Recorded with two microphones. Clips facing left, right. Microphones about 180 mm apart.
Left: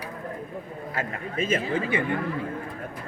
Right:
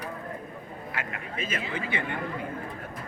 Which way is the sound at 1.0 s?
45° left (ahead or behind).